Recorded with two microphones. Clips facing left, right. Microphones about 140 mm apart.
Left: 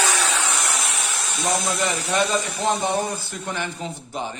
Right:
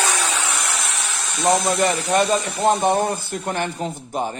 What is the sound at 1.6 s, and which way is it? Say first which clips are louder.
Speech: right 5 dB; 50° right (ahead or behind).